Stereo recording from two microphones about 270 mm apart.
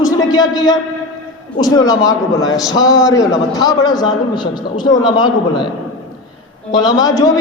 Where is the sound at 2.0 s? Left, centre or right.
Centre.